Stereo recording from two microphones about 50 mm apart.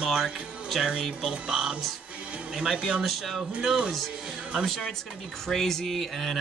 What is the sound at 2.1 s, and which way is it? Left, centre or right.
Music, right.